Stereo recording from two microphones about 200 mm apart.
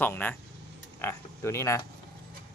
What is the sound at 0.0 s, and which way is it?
Speech, 10° left (ahead or behind).